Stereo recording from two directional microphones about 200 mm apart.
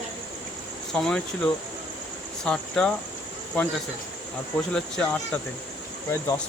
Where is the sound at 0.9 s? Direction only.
5° left (ahead or behind).